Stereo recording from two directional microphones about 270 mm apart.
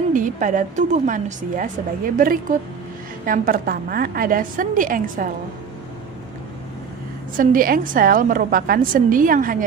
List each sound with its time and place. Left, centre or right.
0.1 s a woman's voice: right
7.3 s a woman's voice: right